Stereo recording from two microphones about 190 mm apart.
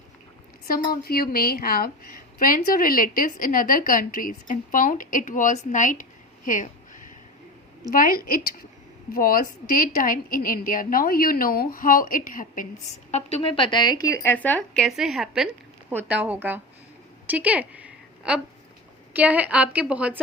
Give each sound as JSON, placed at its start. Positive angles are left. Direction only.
{"t": 0.7, "sound": "a woman's voice", "side_deg": 50}
{"t": 13.1, "sound": "a woman's voice", "side_deg": 35}
{"t": 17.2, "sound": "a sound", "side_deg": -10}
{"t": 19.1, "sound": "a woman's voice", "side_deg": -10}